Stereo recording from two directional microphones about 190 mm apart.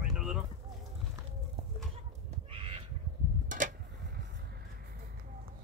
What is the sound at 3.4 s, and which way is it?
Tick-tock, 45° right (ahead or behind).